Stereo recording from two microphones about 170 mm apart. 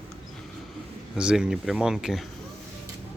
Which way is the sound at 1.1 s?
5° right (ahead or behind).